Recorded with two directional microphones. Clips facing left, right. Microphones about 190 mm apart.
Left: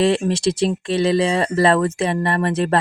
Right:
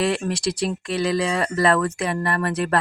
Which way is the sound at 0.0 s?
25° left (ahead or behind).